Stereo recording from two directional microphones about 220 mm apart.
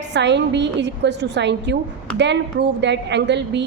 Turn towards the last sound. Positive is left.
turn(degrees=-50)  # may be behind; listen again after turning